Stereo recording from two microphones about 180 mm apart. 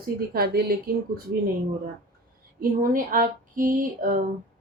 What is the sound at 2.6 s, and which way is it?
Speech, 50° right (ahead or behind).